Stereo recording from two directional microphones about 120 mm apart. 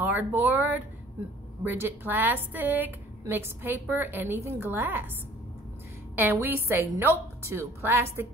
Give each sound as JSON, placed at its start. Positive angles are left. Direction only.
{"t": 0.0, "sound": "a woman's voice", "side_deg": -15}
{"t": 6.1, "sound": "a woman's voice", "side_deg": -20}